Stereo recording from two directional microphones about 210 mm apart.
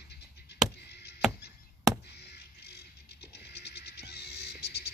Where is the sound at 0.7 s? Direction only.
50° left (ahead or behind).